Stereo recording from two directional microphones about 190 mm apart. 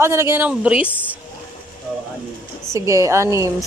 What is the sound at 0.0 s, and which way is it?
Speech, 15° right (ahead or behind).